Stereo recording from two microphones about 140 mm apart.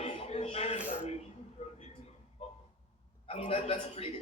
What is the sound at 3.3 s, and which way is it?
Speech, 45° left (ahead or behind).